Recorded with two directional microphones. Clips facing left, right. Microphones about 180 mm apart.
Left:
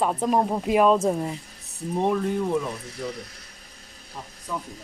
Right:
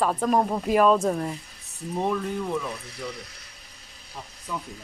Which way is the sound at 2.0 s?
30° left (ahead or behind).